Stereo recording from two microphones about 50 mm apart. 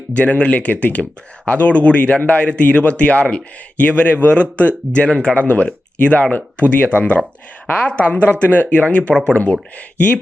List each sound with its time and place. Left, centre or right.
0.1 s speech: left